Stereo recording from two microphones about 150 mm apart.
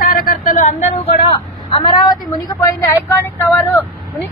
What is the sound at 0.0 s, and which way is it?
Vehicle, 65° left (ahead or behind).